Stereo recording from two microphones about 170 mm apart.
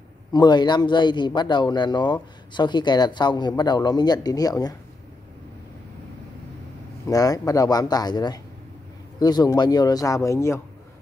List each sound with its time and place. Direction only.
0.3 s speech: 25° left (ahead or behind)
7.1 s speech: 20° left (ahead or behind)